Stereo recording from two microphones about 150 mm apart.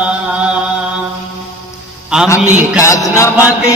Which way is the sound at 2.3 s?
10° right (ahead or behind).